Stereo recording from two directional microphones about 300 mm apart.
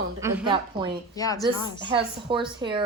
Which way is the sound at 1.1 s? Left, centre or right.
Centre.